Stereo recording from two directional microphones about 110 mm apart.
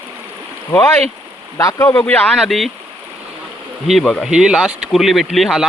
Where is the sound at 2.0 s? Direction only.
15° left (ahead or behind).